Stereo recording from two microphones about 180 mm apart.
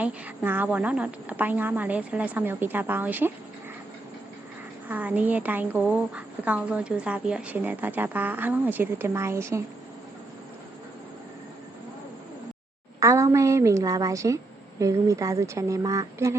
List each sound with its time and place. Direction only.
0.0 s a woman's voice: 10° right (ahead or behind)
4.9 s a woman's voice: 10° right (ahead or behind)
13.0 s a woman's voice: 15° right (ahead or behind)